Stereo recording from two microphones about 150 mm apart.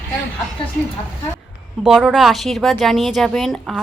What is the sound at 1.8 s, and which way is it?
A woman's voice, 5° right (ahead or behind).